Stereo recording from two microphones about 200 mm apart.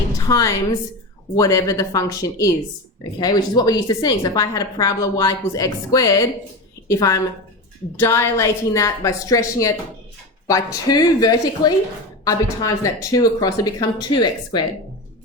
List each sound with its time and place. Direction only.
0.3 s a woman's voice: 15° left (ahead or behind)